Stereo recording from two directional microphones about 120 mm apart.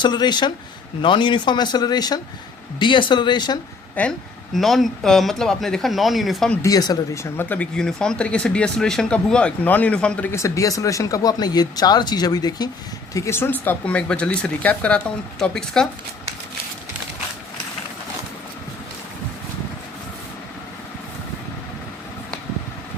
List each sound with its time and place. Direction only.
0.0 s speech: 35° left (ahead or behind)
4.0 s speech: 15° left (ahead or behind)
4.5 s speech: centre (ahead or behind)
6.6 s speech: 30° left (ahead or behind)
7.4 s speech: 10° left (ahead or behind)
10.3 s speech: 25° left (ahead or behind)
13.1 s speech: 25° left (ahead or behind); by 15.9 s 5° left (ahead or behind)